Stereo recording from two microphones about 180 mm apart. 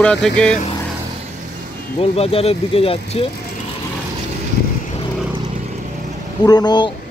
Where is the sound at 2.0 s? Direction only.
35° left (ahead or behind).